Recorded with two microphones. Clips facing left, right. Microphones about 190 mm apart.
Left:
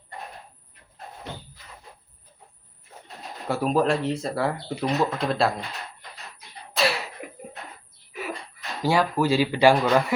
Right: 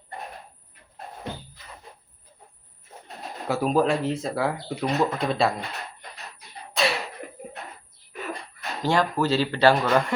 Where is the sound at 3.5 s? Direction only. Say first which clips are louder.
Even; centre (ahead or behind).